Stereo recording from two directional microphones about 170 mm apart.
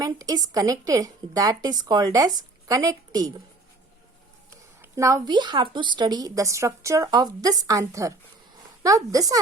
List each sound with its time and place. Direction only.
0.0 s a woman's voice: 20° right (ahead or behind)
4.8 s a woman's voice: 20° right (ahead or behind)